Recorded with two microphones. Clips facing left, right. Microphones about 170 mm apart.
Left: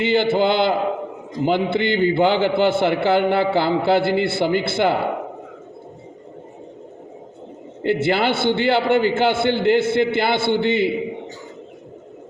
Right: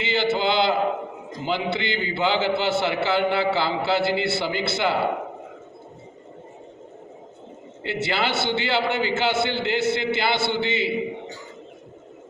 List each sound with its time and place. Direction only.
0.0 s a man's voice: 55° left (ahead or behind)
7.8 s a man's voice: 55° left (ahead or behind)